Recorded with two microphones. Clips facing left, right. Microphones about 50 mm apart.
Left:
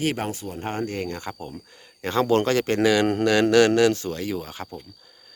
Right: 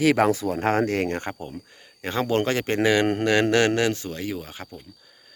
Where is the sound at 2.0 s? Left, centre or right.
Centre.